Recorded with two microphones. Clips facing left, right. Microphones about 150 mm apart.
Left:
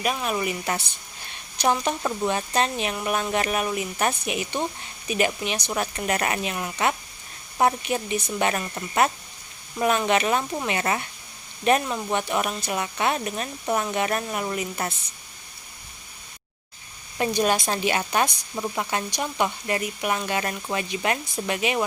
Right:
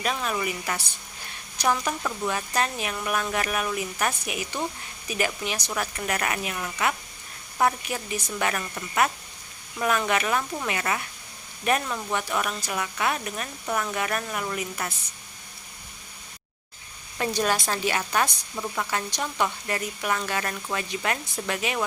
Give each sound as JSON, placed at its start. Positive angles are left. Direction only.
{"t": 0.0, "sound": "a woman's voice", "side_deg": 15}
{"t": 17.2, "sound": "a woman's voice", "side_deg": 15}